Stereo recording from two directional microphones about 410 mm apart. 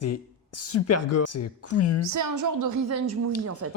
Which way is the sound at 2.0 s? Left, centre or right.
Right.